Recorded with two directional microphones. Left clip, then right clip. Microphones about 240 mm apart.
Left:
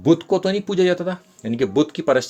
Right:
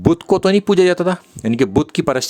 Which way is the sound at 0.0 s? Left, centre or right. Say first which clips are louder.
Right 3 dB; right.